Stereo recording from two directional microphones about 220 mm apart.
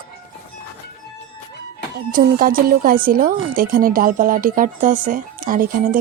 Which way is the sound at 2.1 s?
40° right (ahead or behind).